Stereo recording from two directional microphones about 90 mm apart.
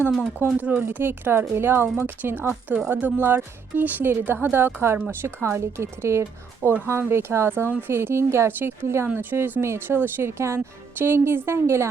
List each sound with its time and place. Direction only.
0.6 s a woman's voice: 20° right (ahead or behind)
4.9 s a woman's voice: 15° right (ahead or behind)
5.4 s speech: 30° right (ahead or behind)